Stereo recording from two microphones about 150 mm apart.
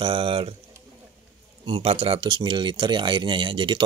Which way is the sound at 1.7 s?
35° right (ahead or behind).